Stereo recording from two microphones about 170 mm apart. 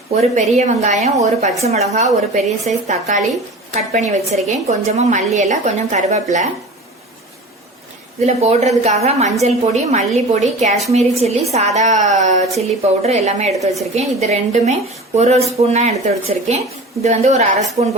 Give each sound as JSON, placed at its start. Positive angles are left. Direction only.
{"t": 0.1, "sound": "a woman's voice", "side_deg": -40}
{"t": 8.2, "sound": "a woman's voice", "side_deg": -40}